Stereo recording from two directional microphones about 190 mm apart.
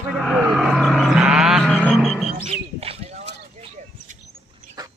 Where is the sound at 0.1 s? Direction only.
Centre (ahead or behind).